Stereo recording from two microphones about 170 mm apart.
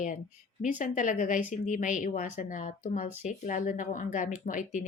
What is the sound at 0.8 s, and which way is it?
Speech, 50° left (ahead or behind).